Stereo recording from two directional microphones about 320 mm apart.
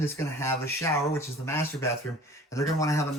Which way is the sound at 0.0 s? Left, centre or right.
Centre.